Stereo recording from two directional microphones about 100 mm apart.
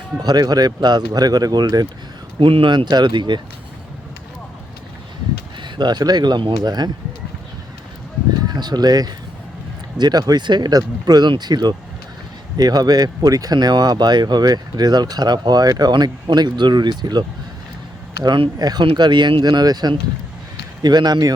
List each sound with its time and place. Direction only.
0.2 s speech: 40° right (ahead or behind)
2.4 s speech: 60° right (ahead or behind)
5.6 s speech: 50° right (ahead or behind)
8.4 s speech: 45° right (ahead or behind)